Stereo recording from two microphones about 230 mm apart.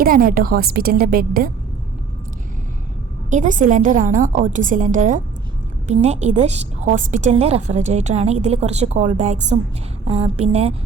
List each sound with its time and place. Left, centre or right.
0.0 s a woman's voice: right
3.2 s a woman's voice: right